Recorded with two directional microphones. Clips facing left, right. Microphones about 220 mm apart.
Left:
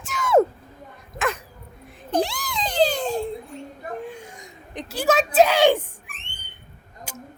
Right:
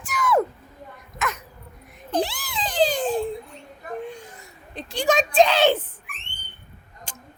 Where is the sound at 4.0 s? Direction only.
10° left (ahead or behind).